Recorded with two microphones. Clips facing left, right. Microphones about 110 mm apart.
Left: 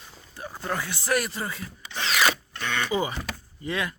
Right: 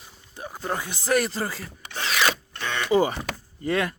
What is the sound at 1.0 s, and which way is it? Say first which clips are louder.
Speech: right 4 dB; 30° right (ahead or behind).